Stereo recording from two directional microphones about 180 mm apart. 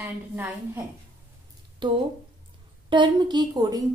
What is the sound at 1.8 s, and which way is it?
A woman's voice, 25° right (ahead or behind).